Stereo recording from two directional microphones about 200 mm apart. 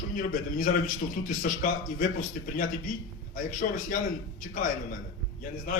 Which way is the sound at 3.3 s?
40° left (ahead or behind).